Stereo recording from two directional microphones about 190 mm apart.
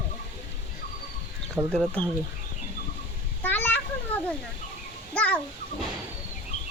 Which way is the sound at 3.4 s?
10° left (ahead or behind).